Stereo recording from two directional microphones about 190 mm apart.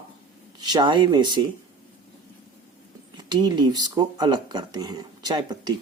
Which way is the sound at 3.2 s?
20° right (ahead or behind).